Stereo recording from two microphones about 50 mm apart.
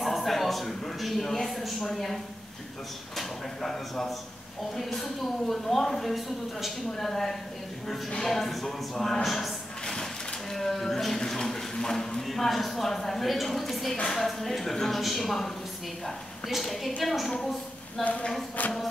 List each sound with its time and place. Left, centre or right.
0.0 s a sound: centre
3.2 s a woman's voice: centre
18.6 s music: left